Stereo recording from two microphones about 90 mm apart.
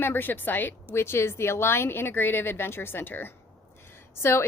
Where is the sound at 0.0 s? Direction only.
20° left (ahead or behind).